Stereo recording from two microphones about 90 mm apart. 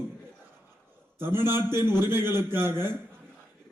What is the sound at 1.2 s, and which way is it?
A man's voice, 25° right (ahead or behind).